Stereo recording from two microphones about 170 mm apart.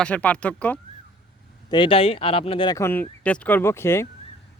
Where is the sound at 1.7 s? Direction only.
30° left (ahead or behind).